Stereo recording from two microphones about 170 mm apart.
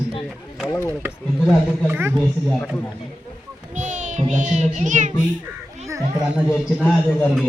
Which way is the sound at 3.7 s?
45° right (ahead or behind).